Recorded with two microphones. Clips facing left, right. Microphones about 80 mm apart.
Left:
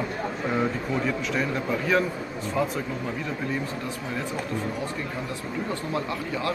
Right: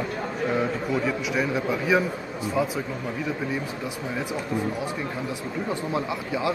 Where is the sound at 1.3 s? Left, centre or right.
Centre.